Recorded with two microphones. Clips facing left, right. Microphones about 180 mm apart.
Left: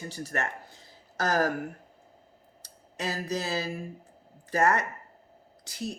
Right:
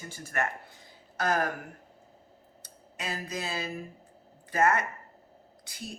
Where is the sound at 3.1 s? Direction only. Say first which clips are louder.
Left 4 dB; 40° left (ahead or behind).